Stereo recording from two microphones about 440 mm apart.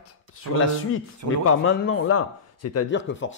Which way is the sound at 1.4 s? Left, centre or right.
Left.